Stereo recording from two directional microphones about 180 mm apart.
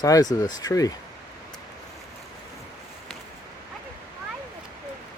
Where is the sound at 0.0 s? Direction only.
20° left (ahead or behind).